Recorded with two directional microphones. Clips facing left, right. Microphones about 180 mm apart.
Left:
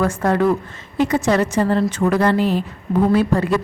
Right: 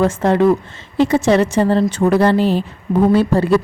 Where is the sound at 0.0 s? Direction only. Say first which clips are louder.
Right 4 dB; 25° right (ahead or behind).